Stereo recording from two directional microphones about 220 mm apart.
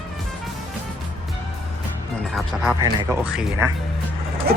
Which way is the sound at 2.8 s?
15° right (ahead or behind).